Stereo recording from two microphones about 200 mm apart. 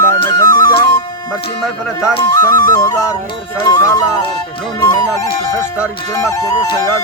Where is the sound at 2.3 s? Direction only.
15° left (ahead or behind).